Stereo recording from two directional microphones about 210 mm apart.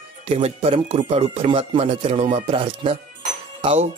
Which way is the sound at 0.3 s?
30° right (ahead or behind).